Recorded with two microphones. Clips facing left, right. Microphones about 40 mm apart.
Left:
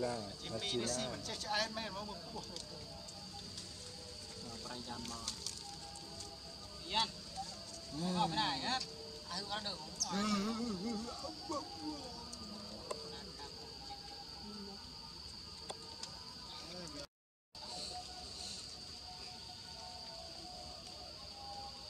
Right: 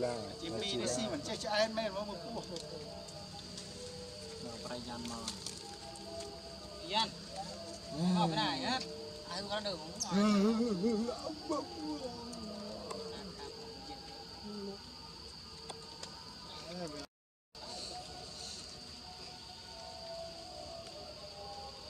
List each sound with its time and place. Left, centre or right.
0.0 s speech: centre
4.5 s speech: centre
6.8 s speech: centre
12.4 s music: right
13.1 s a sound: centre
16.6 s speech: centre